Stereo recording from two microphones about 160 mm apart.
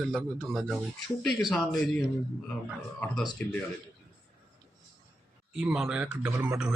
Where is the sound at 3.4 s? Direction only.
10° left (ahead or behind).